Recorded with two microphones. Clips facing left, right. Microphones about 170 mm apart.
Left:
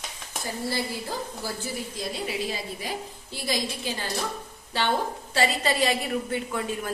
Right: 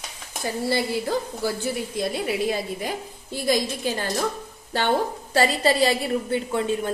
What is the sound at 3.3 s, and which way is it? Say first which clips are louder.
Speech: right 7 dB; 50° right (ahead or behind).